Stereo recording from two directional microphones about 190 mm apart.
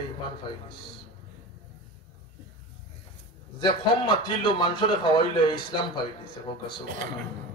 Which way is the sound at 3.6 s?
25° left (ahead or behind).